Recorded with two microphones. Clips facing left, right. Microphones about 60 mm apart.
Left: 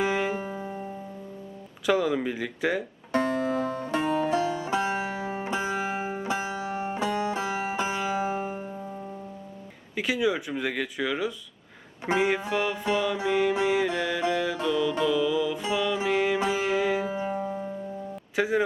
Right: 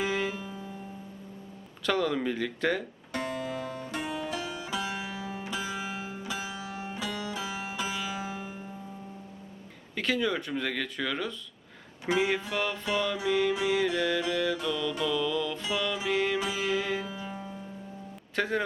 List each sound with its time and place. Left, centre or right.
0.0 s music: centre
0.3 s music: left
1.9 s speech: centre
3.1 s music: left
9.9 s speech: centre
13.5 s music: left
15.0 s speech: centre
16.0 s music: centre
16.4 s music: left
16.7 s music: centre
17.1 s music: left
18.3 s speech: centre